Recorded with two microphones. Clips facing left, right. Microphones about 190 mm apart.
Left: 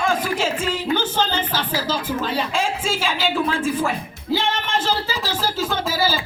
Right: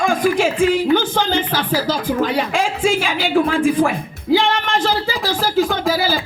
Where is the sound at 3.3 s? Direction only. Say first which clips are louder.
Right 11 dB; 55° right (ahead or behind).